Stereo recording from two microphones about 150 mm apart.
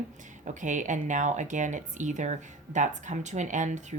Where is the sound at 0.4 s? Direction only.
55° right (ahead or behind).